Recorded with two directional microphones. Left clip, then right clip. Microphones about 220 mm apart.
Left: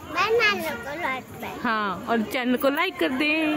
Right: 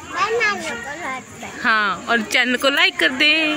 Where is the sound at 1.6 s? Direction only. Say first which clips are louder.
Right 8 dB; 10° left (ahead or behind).